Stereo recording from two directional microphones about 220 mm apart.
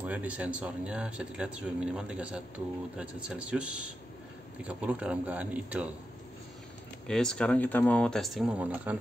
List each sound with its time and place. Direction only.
0.0 s a man's voice: 5° right (ahead or behind)
7.1 s speech: 5° left (ahead or behind)